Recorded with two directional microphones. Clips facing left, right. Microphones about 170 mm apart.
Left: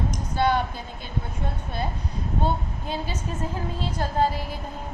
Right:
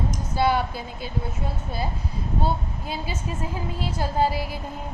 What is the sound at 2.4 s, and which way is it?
A woman's voice, 5° right (ahead or behind).